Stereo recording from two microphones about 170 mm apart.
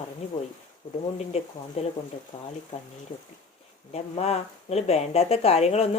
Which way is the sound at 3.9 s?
40° left (ahead or behind).